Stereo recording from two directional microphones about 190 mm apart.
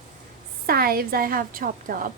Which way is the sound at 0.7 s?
50° right (ahead or behind).